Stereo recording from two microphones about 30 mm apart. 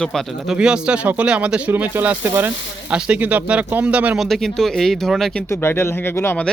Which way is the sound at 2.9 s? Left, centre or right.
Right.